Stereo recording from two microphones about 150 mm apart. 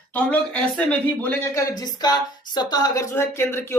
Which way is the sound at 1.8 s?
25° left (ahead or behind).